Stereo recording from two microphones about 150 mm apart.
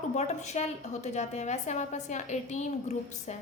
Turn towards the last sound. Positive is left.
turn(degrees=50)  # may be behind; listen again after turning